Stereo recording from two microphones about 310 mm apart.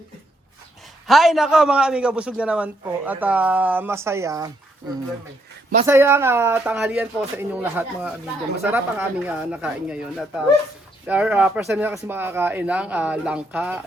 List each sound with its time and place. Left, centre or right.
1.0 s a man's voice: centre
5.8 s a man's voice: centre